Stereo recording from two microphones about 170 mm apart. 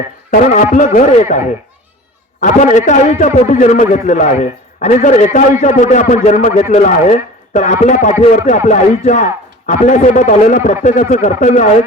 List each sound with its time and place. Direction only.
0.3 s a man's voice: 50° left (ahead or behind)